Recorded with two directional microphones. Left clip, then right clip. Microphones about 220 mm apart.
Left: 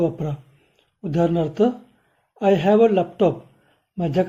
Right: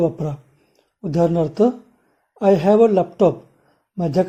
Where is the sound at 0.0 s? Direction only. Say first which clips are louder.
Right 3 dB; 25° right (ahead or behind).